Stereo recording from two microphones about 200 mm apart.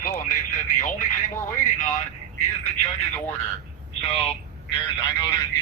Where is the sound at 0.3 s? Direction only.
40° left (ahead or behind).